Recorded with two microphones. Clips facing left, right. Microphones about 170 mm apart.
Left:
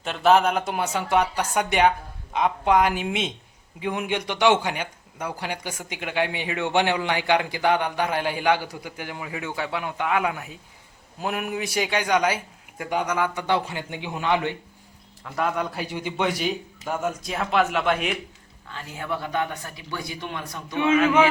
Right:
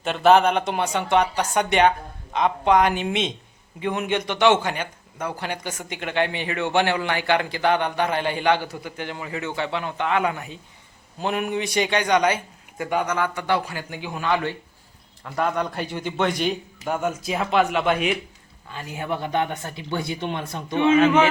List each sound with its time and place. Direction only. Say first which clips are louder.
0.0 s a man's voice: right 2 dB; centre (ahead or behind)
13.1 s a man's voice: right 1 dB; 10° left (ahead or behind)
15.2 s a man's voice: right 2 dB; centre (ahead or behind)
18.7 s speech: right 2 dB; 15° right (ahead or behind)